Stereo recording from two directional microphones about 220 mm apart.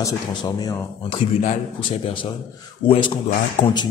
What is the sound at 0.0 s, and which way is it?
A man's voice, 15° left (ahead or behind).